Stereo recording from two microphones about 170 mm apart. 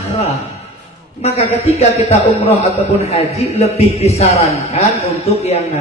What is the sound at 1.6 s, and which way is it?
A man's voice, 40° left (ahead or behind).